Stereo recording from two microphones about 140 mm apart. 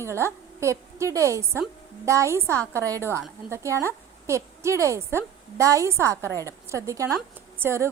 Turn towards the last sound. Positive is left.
turn(degrees=-20)  # may be behind; listen again after turning